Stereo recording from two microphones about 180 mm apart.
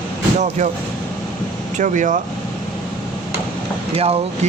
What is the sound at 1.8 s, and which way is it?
Speech, 45° right (ahead or behind).